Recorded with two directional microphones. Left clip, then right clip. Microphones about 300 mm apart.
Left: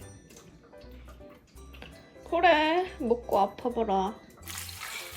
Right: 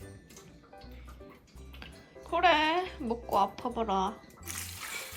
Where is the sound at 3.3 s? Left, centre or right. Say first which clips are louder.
Right 1 dB; right.